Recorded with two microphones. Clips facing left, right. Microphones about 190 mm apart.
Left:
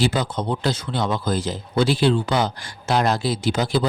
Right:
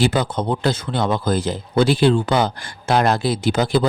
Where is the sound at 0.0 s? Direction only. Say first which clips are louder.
Right 3 dB; 55° right (ahead or behind).